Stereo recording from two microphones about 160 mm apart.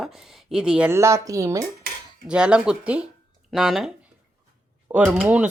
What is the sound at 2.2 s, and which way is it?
Speech, 5° right (ahead or behind).